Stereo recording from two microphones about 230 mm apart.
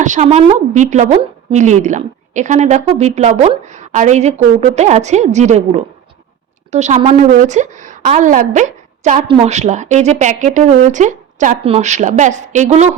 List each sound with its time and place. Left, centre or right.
0.0 s a woman's voice: right